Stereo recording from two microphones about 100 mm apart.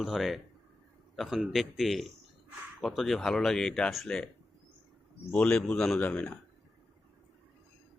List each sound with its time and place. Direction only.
0.0 s speech: centre (ahead or behind)
5.3 s a man's voice: 10° left (ahead or behind)